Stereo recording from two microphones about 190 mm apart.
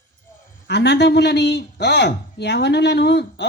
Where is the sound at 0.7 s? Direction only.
60° left (ahead or behind).